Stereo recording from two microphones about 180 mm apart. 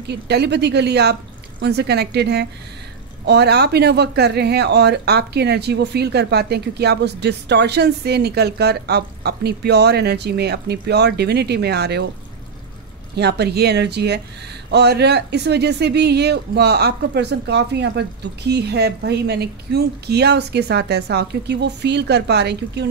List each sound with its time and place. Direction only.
0.1 s speech: 65° right (ahead or behind)
13.1 s speech: 65° right (ahead or behind)